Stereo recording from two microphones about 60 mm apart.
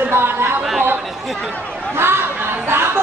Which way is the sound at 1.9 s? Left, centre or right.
Right.